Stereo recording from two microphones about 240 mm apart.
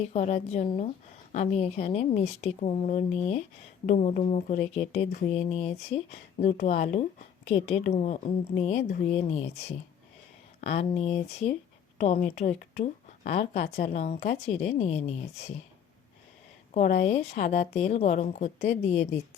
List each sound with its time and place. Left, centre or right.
0.0 s speech: left
16.7 s speech: left